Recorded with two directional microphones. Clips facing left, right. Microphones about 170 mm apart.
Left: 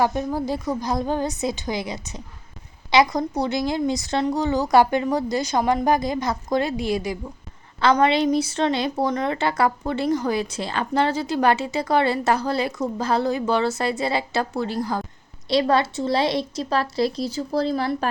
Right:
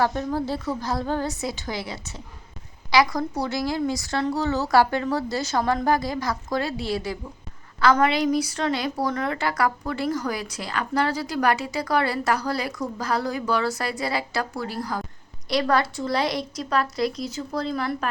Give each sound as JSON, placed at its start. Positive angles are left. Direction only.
{"t": 0.0, "sound": "a woman's voice", "side_deg": 15}